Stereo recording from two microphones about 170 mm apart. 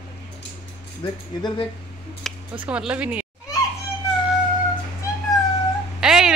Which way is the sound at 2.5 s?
10° right (ahead or behind).